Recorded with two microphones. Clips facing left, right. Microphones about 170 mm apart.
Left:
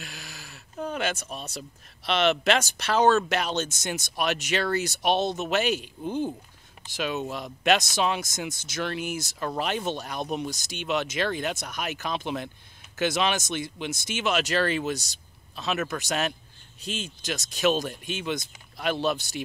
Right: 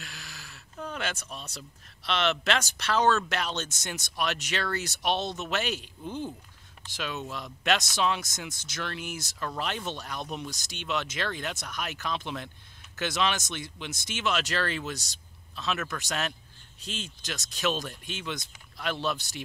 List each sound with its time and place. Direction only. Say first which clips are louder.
0.0 s a sound: left 3 dB; 15° left (ahead or behind)
1.3 s speech: left 5 dB; 50° left (ahead or behind)
2.0 s speech: left 5 dB; 15° left (ahead or behind)
5.1 s speech: left 6 dB; 45° left (ahead or behind)
5.5 s speech: left 6 dB; 10° left (ahead or behind)